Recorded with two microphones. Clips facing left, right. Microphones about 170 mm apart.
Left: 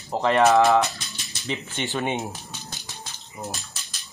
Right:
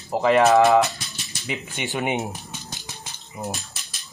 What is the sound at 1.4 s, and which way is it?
Speech, 15° right (ahead or behind).